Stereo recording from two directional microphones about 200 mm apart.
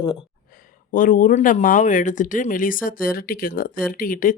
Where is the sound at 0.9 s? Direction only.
45° left (ahead or behind).